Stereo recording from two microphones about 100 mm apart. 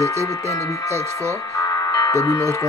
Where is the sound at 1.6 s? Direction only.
40° left (ahead or behind).